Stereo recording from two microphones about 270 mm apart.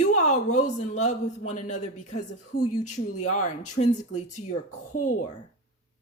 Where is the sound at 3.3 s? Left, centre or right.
Left.